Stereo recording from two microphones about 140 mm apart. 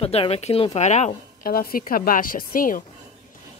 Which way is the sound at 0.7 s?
55° left (ahead or behind).